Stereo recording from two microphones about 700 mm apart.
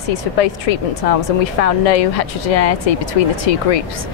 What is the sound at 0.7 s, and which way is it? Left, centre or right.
A woman's voice, left.